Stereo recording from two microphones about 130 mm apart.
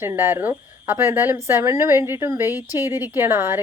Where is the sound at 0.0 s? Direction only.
20° right (ahead or behind).